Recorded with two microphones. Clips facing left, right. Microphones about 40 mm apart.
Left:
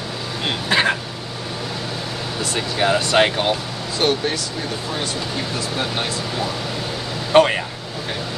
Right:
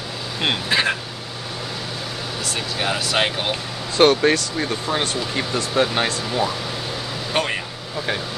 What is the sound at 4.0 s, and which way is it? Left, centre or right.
Speech, right.